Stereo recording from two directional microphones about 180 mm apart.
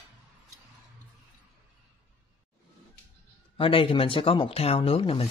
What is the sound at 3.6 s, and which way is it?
Speech, 30° left (ahead or behind).